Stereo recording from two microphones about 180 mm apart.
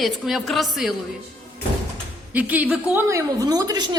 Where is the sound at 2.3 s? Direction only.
10° right (ahead or behind).